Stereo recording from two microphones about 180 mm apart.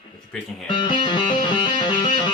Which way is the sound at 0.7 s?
25° left (ahead or behind).